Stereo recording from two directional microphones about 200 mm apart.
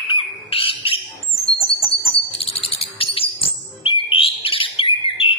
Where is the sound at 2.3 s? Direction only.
30° left (ahead or behind).